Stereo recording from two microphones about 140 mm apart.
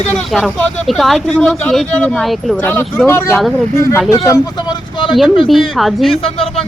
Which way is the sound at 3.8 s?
20° left (ahead or behind).